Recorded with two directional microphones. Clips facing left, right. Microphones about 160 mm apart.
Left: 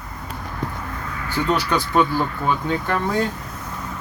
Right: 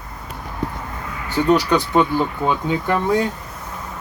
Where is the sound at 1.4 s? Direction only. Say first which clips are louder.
Right 6 dB; 15° right (ahead or behind).